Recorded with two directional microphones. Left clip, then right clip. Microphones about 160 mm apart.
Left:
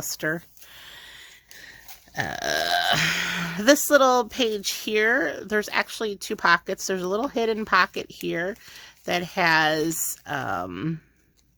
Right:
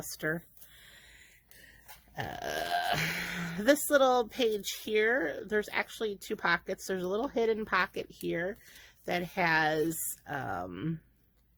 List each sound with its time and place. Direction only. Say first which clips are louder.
0.1 s speech: left 7 dB; 25° left (ahead or behind)
2.1 s speech: left 10 dB; 30° left (ahead or behind)